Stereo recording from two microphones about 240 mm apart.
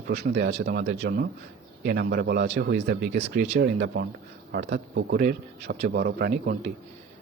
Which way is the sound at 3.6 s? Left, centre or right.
Right.